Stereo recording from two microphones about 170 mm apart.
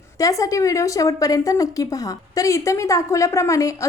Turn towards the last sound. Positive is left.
turn(degrees=20)  # may be behind; listen again after turning